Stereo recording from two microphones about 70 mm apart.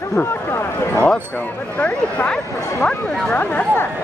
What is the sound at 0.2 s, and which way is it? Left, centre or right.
Speech, left.